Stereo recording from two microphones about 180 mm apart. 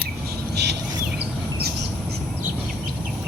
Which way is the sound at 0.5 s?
70° right (ahead or behind).